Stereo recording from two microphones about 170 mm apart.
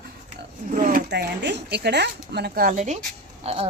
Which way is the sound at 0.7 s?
55° right (ahead or behind).